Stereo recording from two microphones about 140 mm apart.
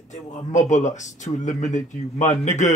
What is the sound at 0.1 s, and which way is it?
Speech, 60° left (ahead or behind).